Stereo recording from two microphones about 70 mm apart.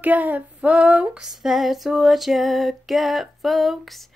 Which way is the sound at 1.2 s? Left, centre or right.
Centre.